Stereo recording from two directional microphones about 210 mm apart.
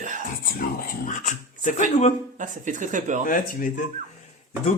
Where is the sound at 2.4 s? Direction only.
35° right (ahead or behind).